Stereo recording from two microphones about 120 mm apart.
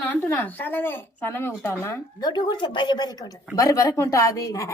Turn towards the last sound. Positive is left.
turn(degrees=25)  # may be behind; listen again after turning